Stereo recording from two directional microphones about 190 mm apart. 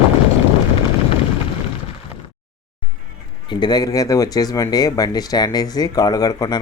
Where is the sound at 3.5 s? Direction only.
25° left (ahead or behind).